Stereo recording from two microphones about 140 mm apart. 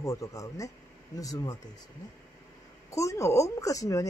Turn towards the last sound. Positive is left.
turn(degrees=25)  # may be behind; listen again after turning